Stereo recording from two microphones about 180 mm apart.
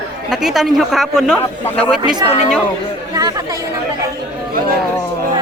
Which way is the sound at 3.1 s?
20° right (ahead or behind).